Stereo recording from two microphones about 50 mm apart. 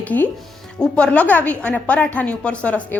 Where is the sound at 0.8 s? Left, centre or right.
Left.